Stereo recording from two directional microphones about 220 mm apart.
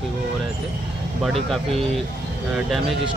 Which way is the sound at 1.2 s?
Centre (ahead or behind).